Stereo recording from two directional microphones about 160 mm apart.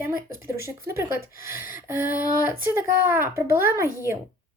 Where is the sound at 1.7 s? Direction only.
15° right (ahead or behind).